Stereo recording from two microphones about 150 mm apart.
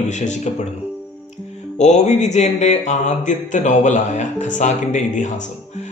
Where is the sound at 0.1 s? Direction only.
55° left (ahead or behind).